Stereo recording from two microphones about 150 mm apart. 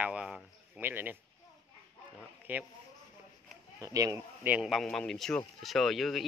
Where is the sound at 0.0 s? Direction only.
5° right (ahead or behind).